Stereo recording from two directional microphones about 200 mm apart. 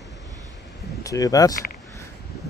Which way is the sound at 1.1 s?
15° left (ahead or behind).